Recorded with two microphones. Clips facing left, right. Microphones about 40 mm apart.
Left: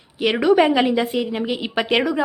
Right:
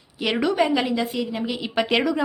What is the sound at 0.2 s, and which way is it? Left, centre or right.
Speech, centre.